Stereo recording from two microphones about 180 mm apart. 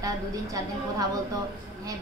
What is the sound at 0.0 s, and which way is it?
A woman's voice, 20° right (ahead or behind).